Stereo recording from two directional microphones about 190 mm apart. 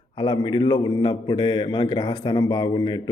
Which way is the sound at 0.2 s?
25° left (ahead or behind).